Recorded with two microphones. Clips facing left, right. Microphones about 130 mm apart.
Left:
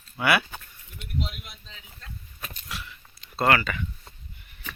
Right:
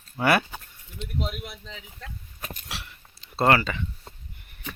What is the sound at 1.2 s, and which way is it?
Speech, 55° right (ahead or behind).